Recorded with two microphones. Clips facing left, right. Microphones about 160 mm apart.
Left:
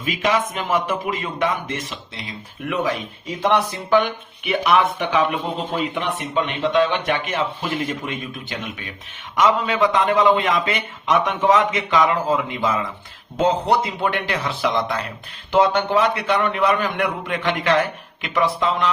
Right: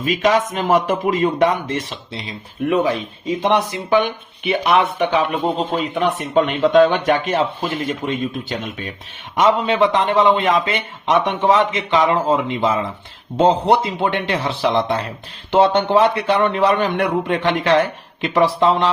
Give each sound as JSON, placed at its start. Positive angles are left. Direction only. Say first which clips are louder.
{"t": 0.0, "sound": "a man's voice", "louder": "right 4 dB", "side_deg": -40}
{"t": 4.6, "sound": "a man's voice", "louder": "right 2 dB", "side_deg": -30}